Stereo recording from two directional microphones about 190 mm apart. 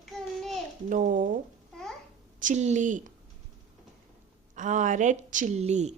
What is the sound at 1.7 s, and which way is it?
Babbling, centre (ahead or behind).